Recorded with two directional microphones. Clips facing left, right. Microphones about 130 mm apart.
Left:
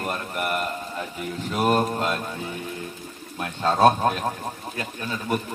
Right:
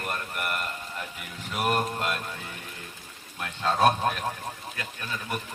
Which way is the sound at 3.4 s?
30° left (ahead or behind).